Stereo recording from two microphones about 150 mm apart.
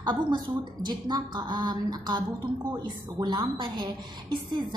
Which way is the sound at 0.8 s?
30° right (ahead or behind).